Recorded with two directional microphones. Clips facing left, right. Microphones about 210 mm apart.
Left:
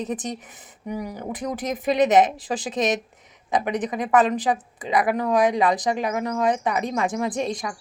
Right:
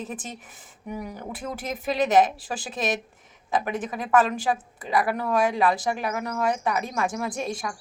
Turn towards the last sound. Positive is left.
turn(degrees=20)  # may be behind; listen again after turning